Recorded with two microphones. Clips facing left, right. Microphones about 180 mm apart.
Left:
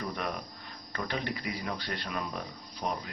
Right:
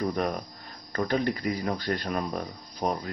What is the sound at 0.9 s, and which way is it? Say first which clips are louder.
Speech: right 8 dB; 40° right (ahead or behind).